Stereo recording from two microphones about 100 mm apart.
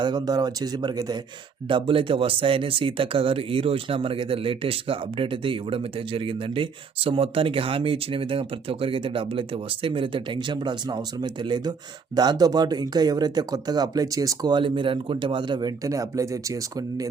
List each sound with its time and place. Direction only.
0.0 s speech: 45° right (ahead or behind)
1.6 s speech: 60° right (ahead or behind); by 14.5 s 35° right (ahead or behind)
14.5 s speech: 55° right (ahead or behind); by 17.1 s 35° right (ahead or behind)